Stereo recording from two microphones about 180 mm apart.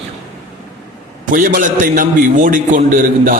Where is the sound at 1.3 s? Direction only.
50° right (ahead or behind).